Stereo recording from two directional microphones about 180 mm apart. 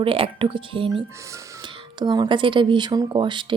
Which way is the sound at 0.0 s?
30° right (ahead or behind).